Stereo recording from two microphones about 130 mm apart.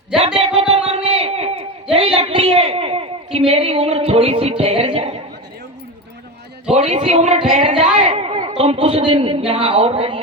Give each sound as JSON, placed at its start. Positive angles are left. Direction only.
{"t": 0.3, "sound": "a sound", "side_deg": -45}
{"t": 3.3, "sound": "speech", "side_deg": -50}
{"t": 6.7, "sound": "a man's voice", "side_deg": -55}
{"t": 7.6, "sound": "a woman's voice", "side_deg": -45}
{"t": 7.9, "sound": "a sound", "side_deg": -55}
{"t": 9.5, "sound": "a woman's voice", "side_deg": -50}